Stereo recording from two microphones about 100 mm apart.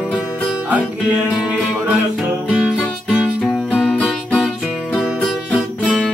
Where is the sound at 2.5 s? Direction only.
5° right (ahead or behind).